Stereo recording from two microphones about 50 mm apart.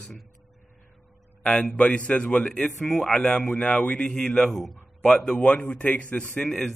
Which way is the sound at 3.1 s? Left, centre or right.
Centre.